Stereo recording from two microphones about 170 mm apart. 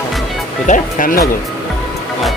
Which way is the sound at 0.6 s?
50° left (ahead or behind).